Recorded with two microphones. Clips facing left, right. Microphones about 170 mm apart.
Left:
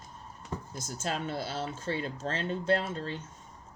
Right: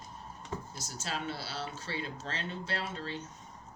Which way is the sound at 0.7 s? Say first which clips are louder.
Left 8 dB; 50° left (ahead or behind).